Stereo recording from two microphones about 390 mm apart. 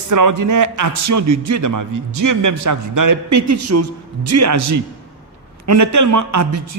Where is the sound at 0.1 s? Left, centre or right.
Right.